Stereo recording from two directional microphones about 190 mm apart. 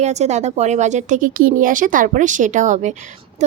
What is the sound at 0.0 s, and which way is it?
Speech, 35° right (ahead or behind).